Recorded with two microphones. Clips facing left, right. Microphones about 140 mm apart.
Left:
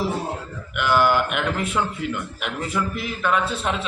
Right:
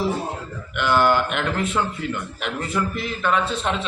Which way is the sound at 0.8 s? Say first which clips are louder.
Even; 10° left (ahead or behind).